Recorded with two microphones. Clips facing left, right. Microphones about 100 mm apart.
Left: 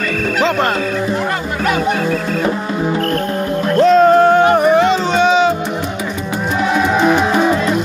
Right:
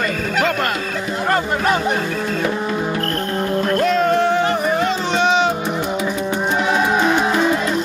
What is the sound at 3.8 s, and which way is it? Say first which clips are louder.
Music: left 10 dB; 35° left (ahead or behind).